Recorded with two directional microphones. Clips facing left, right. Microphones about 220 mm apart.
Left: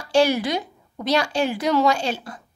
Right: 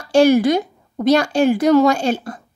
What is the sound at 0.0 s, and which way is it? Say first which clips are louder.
A woman's voice: right 7 dB; 50° right (ahead or behind).